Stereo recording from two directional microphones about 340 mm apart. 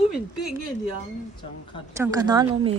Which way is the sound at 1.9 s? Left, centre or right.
Centre.